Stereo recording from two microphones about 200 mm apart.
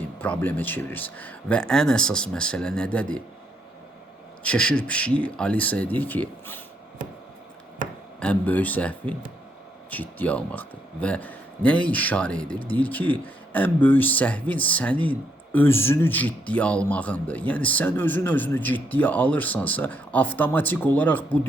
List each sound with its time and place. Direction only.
0.2 s speech: 10° left (ahead or behind)
4.4 s speech: 5° left (ahead or behind)
8.2 s speech: 5° left (ahead or behind)